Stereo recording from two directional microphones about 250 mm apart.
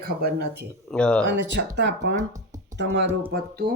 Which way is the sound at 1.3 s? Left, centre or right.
Right.